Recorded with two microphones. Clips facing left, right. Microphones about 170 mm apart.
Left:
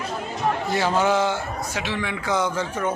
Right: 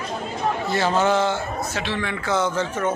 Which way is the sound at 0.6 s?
10° left (ahead or behind).